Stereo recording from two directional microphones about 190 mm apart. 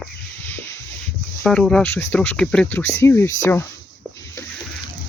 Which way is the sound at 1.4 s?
5° left (ahead or behind).